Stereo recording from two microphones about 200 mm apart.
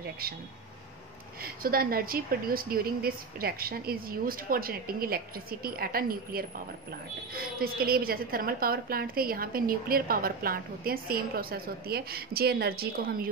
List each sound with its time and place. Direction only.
1.4 s a woman's voice: 50° right (ahead or behind)